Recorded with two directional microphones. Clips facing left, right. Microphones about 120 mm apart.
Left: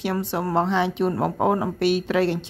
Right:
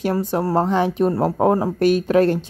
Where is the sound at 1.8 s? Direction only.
45° right (ahead or behind).